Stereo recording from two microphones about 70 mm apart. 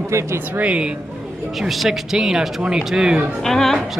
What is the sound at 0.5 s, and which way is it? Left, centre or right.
Speech, centre.